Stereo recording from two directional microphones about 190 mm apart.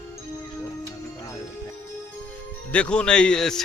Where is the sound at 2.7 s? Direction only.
5° left (ahead or behind).